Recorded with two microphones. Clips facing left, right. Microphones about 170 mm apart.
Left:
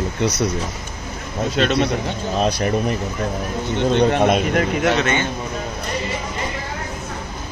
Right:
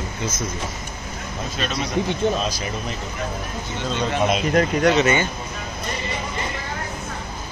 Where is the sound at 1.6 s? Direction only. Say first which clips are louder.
Left 5 dB; 65° left (ahead or behind).